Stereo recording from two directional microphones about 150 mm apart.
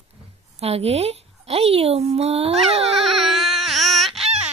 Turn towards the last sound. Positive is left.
turn(degrees=0)  # may be behind; listen again after turning